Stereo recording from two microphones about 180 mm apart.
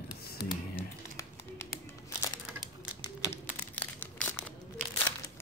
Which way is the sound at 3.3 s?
10° left (ahead or behind).